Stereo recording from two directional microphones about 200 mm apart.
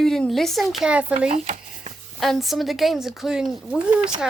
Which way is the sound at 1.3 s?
35° right (ahead or behind).